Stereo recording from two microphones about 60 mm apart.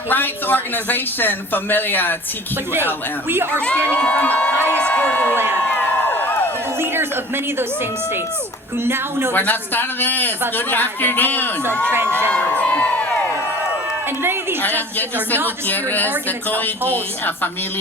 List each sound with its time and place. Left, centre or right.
0.1 s speech: left
3.2 s speech: right
3.8 s speech: left
5.6 s a sound: left
6.7 s a man's voice: right
8.8 s speech: right
9.3 s speech: left
12.3 s crowd: left
14.6 s speech: left